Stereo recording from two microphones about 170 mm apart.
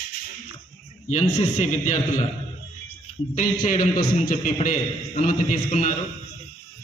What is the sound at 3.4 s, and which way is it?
A man's voice, 50° left (ahead or behind).